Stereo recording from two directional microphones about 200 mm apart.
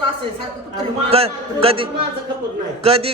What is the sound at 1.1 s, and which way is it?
Speech, 30° right (ahead or behind).